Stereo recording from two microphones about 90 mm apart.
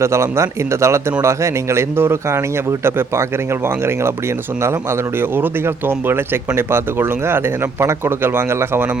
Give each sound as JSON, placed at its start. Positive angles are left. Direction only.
{"t": 0.0, "sound": "a man's voice", "side_deg": -30}
{"t": 4.6, "sound": "speech", "side_deg": -30}